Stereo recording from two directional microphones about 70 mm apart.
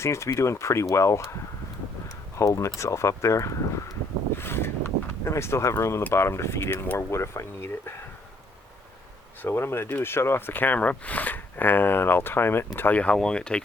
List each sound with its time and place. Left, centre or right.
0.0 s speech: left
2.4 s speech: left
4.4 s speech: left
6.0 s speech: left
6.2 s speech: left
9.4 s speech: left
13.1 s speech: centre